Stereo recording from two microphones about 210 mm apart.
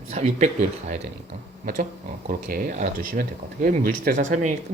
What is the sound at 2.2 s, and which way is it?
Speech, 40° right (ahead or behind).